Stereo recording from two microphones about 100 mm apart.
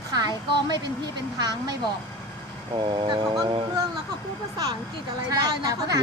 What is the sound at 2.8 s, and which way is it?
Speech, 50° right (ahead or behind).